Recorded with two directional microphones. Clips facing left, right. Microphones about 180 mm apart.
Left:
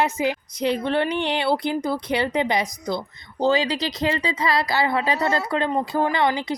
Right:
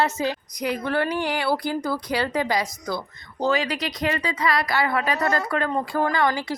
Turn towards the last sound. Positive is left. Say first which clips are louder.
# left 1 dB
turn(degrees=20)  # may be behind; listen again after turning